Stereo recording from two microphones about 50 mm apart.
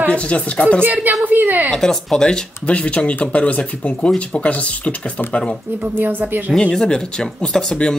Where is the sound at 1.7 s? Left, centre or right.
Centre.